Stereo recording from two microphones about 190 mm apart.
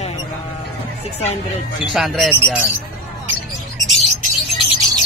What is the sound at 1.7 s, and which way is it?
Speech, centre (ahead or behind).